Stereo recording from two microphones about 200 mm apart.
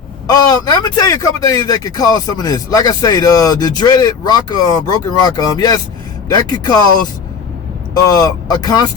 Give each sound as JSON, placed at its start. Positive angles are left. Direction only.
{"t": 0.3, "sound": "speech", "side_deg": 20}
{"t": 8.1, "sound": "speech", "side_deg": 20}